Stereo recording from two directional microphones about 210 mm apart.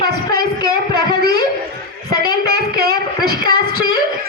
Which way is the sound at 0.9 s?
50° right (ahead or behind).